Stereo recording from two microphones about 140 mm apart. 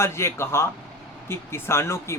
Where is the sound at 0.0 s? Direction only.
20° left (ahead or behind).